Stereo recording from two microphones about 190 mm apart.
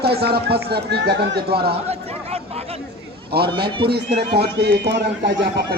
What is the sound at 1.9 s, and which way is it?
Speech, 35° right (ahead or behind).